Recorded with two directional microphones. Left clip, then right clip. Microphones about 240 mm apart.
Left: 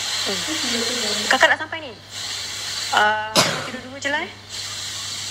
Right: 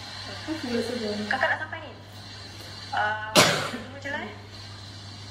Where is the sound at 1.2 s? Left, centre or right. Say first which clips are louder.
Left 10 dB; left.